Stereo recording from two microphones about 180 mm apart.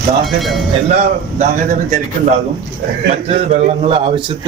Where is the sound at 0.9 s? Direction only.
40° right (ahead or behind).